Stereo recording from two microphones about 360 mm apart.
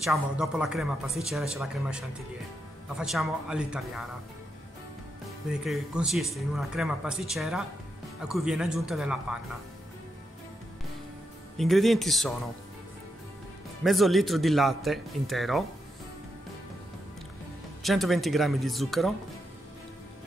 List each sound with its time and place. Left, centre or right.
0.0 s a man's voice: centre
5.5 s a man's voice: centre
11.5 s a man's voice: centre
13.8 s a man's voice: centre
17.8 s a man's voice: centre